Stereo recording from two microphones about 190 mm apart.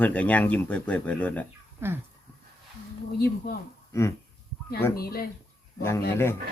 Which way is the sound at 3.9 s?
15° left (ahead or behind).